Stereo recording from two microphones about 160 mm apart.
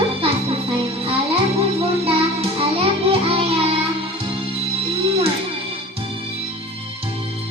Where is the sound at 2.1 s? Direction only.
35° right (ahead or behind).